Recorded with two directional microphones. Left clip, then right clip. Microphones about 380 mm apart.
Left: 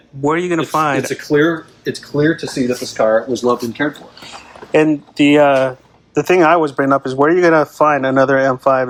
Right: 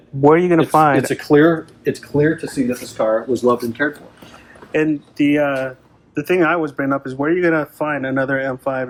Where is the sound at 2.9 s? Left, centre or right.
Left.